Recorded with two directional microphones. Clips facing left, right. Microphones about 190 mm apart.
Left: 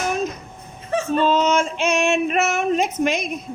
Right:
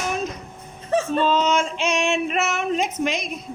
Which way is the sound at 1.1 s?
45° left (ahead or behind).